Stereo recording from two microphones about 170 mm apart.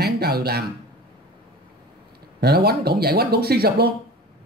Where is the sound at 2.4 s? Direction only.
70° right (ahead or behind).